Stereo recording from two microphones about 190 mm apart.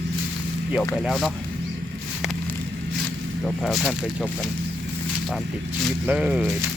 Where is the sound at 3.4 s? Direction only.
Centre (ahead or behind).